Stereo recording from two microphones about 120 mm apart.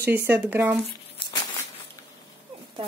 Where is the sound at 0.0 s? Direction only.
15° right (ahead or behind).